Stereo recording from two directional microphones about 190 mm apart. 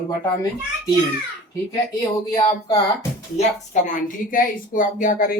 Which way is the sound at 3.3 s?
40° left (ahead or behind).